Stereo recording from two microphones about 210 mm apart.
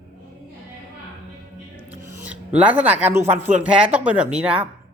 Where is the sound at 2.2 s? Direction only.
5° right (ahead or behind).